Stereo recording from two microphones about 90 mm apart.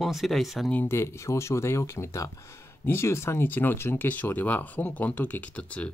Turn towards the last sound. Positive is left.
turn(degrees=15)  # may be behind; listen again after turning